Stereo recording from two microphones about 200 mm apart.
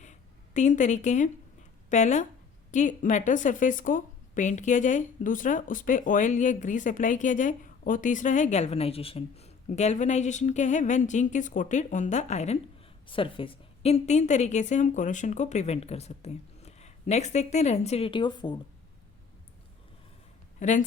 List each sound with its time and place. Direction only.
0.0 s a sound: 35° left (ahead or behind)
1.9 s a woman's voice: 35° left (ahead or behind)
20.6 s a woman's voice: 40° left (ahead or behind)